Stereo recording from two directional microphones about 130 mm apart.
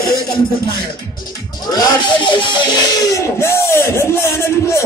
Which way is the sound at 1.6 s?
30° left (ahead or behind).